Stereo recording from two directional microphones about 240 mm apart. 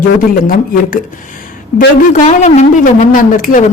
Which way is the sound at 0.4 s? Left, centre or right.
Left.